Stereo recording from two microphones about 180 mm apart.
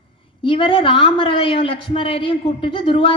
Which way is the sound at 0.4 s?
30° left (ahead or behind).